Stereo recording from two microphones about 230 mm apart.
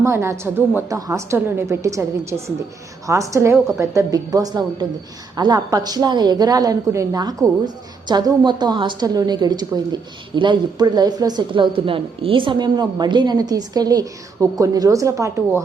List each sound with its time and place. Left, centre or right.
0.0 s a woman's voice: centre